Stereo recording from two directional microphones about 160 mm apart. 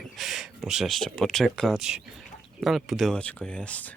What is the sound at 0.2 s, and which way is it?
Speech, centre (ahead or behind).